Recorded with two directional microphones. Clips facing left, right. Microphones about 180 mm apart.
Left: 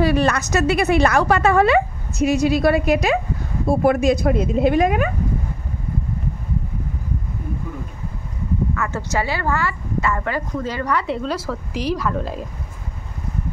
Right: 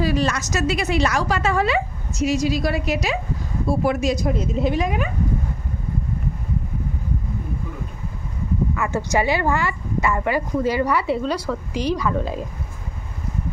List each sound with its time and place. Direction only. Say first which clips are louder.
0.0 s a woman's voice: left 4 dB; 60° left (ahead or behind)
8.7 s speech: right 2 dB; 15° right (ahead or behind)